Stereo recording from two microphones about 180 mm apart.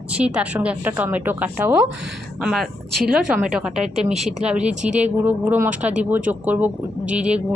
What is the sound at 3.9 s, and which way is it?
Speech, 35° right (ahead or behind).